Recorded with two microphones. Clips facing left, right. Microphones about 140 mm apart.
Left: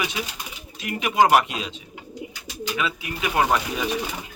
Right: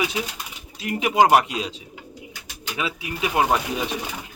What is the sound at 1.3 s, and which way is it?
Speech, 35° right (ahead or behind).